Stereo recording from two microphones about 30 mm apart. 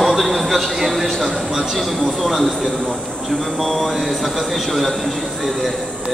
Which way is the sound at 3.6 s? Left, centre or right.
Centre.